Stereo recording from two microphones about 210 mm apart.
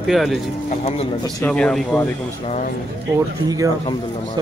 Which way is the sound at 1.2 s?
10° left (ahead or behind).